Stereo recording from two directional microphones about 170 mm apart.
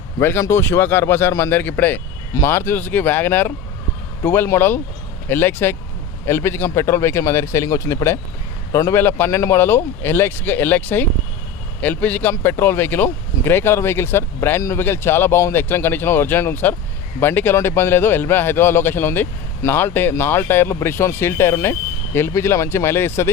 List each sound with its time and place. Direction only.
0.2 s a man's voice: 15° left (ahead or behind)